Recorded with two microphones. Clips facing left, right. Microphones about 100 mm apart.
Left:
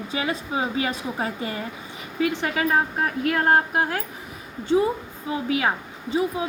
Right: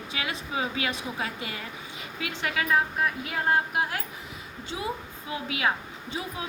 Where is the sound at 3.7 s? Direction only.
40° left (ahead or behind).